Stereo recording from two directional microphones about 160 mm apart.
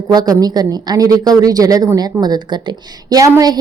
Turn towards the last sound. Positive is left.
turn(degrees=-20)  # may be behind; listen again after turning